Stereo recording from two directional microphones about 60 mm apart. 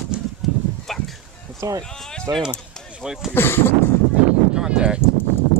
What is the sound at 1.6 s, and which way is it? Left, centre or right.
Speech, right.